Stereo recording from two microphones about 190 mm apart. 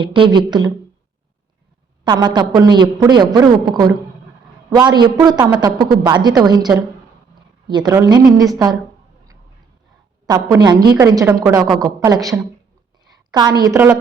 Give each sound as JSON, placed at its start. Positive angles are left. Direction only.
{"t": 0.0, "sound": "a woman's voice", "side_deg": -25}
{"t": 2.0, "sound": "a woman's voice", "side_deg": -20}
{"t": 10.2, "sound": "a woman's voice", "side_deg": -20}